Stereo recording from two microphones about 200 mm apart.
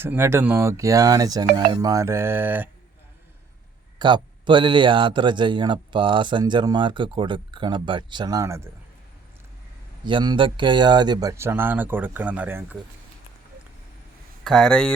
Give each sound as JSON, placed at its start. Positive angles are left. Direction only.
{"t": 0.0, "sound": "speech", "side_deg": -10}
{"t": 3.9, "sound": "a man's voice", "side_deg": -20}
{"t": 10.0, "sound": "speech", "side_deg": -25}
{"t": 14.4, "sound": "speech", "side_deg": 0}